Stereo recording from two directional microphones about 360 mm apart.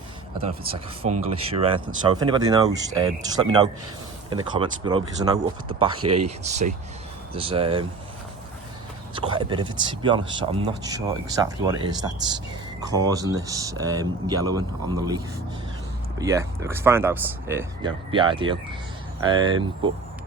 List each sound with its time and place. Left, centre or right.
1.1 s speech: centre
6.0 s speech: right
6.2 s speech: centre
9.1 s speech: centre
16.2 s speech: centre